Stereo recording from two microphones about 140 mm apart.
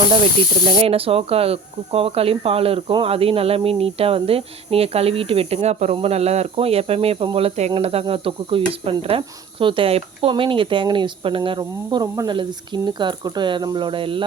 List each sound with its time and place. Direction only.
0.8 s speech: 45° right (ahead or behind)